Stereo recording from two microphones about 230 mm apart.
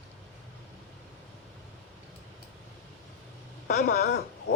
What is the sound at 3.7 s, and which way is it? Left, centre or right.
Speech, left.